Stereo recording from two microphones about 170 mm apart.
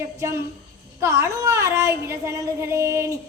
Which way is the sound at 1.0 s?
15° right (ahead or behind).